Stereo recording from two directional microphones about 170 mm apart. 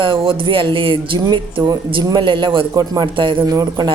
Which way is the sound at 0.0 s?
30° right (ahead or behind).